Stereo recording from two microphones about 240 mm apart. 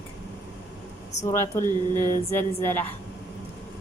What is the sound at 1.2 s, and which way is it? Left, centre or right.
Speech, centre.